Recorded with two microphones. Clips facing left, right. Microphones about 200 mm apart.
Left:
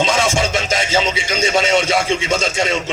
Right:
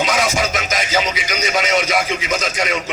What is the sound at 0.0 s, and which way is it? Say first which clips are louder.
Music: left 2 dB; 30° left (ahead or behind).